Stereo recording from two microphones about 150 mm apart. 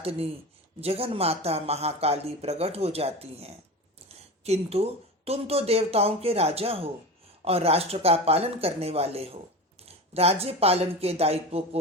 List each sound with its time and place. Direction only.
0.0 s speech: 40° right (ahead or behind)